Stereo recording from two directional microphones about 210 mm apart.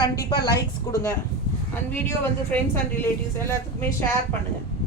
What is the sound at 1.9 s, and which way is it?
Speech, 10° left (ahead or behind).